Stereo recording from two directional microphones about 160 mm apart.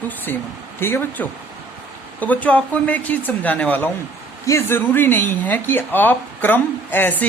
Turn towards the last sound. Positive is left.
turn(degrees=10)  # may be behind; listen again after turning